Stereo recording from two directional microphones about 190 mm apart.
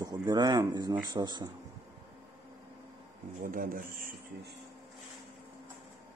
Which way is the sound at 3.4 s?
45° right (ahead or behind).